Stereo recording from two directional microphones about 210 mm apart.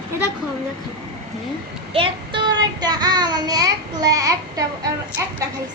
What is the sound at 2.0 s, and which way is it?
Child singing, 20° right (ahead or behind).